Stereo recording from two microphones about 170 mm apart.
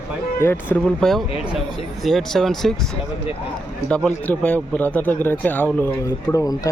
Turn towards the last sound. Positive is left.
turn(degrees=20)  # may be behind; listen again after turning